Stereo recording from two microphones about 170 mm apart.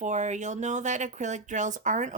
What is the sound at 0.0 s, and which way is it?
Speech, 45° right (ahead or behind).